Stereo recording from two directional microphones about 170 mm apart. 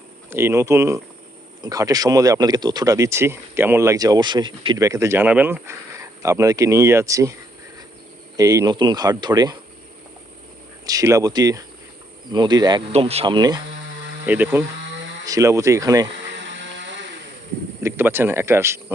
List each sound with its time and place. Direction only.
0.3 s speech: 15° right (ahead or behind)
8.4 s speech: 20° right (ahead or behind)
10.8 s speech: 20° right (ahead or behind)
12.9 s speech: 35° right (ahead or behind)
14.3 s speech: 10° right (ahead or behind)
14.8 s a sound: 90° right
15.3 s speech: 20° right (ahead or behind)
16.1 s vehicle: 90° right
17.8 s speech: 15° right (ahead or behind)